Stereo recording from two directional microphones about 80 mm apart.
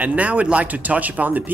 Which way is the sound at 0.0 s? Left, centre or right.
Centre.